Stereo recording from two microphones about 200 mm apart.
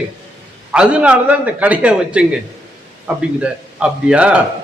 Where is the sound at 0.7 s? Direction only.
5° right (ahead or behind).